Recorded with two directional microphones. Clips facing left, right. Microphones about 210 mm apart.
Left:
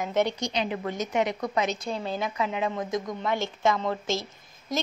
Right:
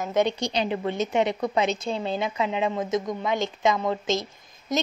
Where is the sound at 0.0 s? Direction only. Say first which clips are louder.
Right 2 dB; 15° right (ahead or behind).